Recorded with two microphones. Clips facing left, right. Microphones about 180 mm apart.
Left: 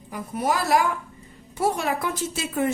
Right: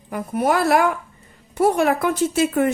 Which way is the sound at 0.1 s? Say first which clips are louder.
Right 5 dB; 60° right (ahead or behind).